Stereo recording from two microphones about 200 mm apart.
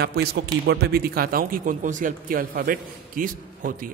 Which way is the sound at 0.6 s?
50° right (ahead or behind).